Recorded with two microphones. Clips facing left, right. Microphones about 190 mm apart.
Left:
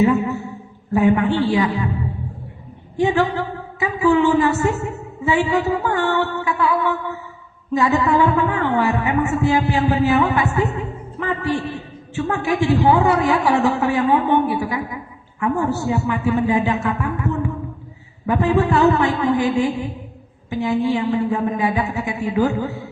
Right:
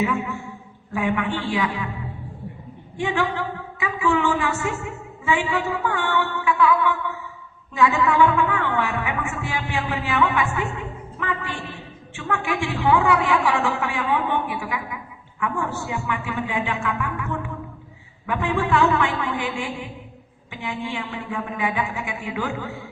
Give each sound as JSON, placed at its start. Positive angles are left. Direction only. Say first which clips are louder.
{"t": 0.0, "sound": "a sound", "louder": "left 7 dB", "side_deg": 40}
{"t": 0.9, "sound": "a woman's voice", "louder": "left 8 dB", "side_deg": 40}
{"t": 3.0, "sound": "a woman's voice", "louder": "left 6 dB", "side_deg": 40}